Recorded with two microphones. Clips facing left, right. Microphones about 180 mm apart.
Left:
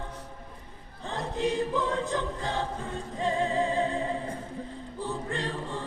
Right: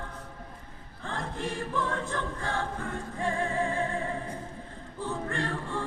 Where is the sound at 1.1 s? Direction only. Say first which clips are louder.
Left 5 dB; 15° left (ahead or behind).